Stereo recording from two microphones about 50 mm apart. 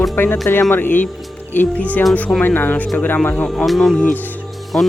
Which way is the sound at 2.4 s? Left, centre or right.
Left.